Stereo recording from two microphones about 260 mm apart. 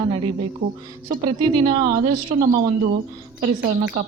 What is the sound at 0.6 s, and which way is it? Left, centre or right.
Speech, right.